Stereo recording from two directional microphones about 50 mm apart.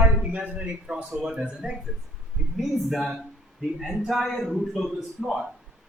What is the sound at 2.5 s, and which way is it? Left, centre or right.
A man's voice, centre.